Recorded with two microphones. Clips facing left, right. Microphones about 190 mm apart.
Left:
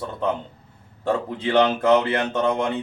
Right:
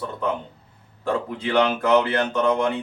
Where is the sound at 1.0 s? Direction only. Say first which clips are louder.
Left 1 dB; 25° left (ahead or behind).